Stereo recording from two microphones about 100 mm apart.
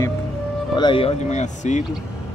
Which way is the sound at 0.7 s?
50° left (ahead or behind).